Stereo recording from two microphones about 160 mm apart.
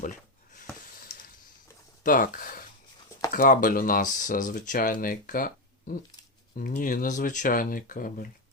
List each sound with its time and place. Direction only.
0.0 s a sound: 55° left (ahead or behind)
2.0 s speech: 60° left (ahead or behind)
6.6 s speech: 60° left (ahead or behind)